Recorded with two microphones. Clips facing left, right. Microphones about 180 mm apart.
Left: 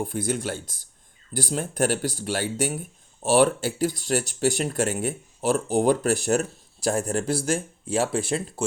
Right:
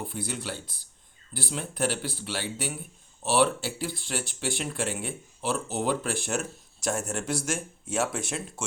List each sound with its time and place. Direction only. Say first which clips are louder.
0.0 s speech: left 7 dB; 45° left (ahead or behind)